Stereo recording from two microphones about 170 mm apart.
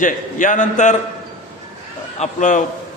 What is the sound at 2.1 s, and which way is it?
Speech, 45° left (ahead or behind).